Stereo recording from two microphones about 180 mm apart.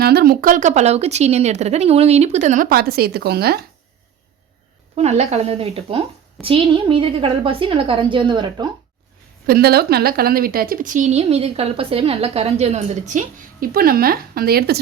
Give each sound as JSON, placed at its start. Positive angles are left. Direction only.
{"t": 0.0, "sound": "a woman's voice", "side_deg": -60}
{"t": 4.9, "sound": "a woman's voice", "side_deg": -35}
{"t": 9.5, "sound": "a woman's voice", "side_deg": -60}